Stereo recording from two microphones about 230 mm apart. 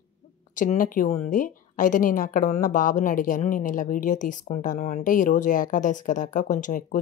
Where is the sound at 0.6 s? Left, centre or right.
Left.